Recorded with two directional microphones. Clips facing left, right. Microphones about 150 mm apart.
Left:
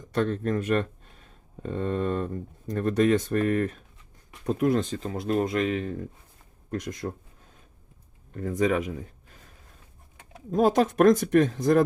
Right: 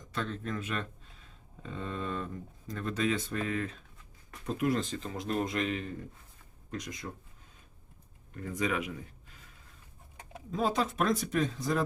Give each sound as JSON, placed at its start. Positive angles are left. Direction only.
{"t": 0.1, "sound": "speech", "side_deg": 50}
{"t": 8.3, "sound": "speech", "side_deg": 45}
{"t": 10.5, "sound": "speech", "side_deg": 45}